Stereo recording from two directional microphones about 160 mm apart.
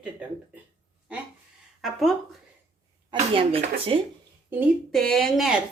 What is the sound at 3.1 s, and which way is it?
Speech, 35° right (ahead or behind).